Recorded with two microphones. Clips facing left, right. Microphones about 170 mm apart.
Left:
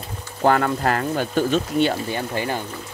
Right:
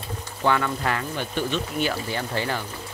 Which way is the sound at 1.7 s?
25° left (ahead or behind).